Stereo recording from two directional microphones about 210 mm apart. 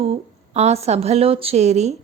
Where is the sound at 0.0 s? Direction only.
30° right (ahead or behind).